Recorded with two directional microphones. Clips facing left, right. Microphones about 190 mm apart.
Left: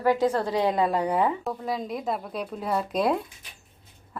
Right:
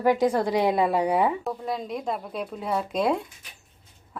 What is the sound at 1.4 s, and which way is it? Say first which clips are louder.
Speech: even; centre (ahead or behind).